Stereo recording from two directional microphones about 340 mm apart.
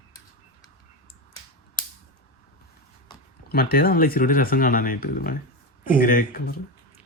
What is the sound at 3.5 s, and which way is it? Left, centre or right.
Speech, left.